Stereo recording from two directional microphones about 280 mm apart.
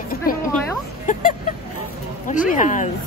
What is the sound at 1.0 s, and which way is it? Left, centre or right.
Vehicle, left.